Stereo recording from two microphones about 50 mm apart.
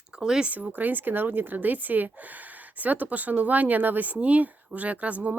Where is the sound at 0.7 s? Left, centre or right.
Right.